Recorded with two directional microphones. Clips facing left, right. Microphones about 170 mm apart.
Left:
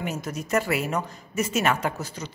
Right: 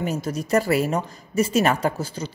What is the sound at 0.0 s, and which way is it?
A woman's voice, 35° right (ahead or behind).